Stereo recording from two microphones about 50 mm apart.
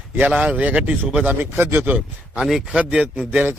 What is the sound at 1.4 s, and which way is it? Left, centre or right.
Speech, right.